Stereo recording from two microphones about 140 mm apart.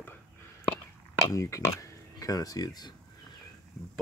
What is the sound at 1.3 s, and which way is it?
Speech, 20° left (ahead or behind).